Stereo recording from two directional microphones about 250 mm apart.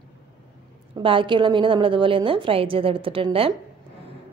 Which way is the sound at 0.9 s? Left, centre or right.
Centre.